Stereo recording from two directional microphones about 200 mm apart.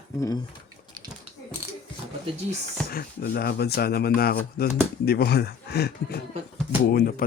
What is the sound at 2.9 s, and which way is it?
Speech, 50° left (ahead or behind).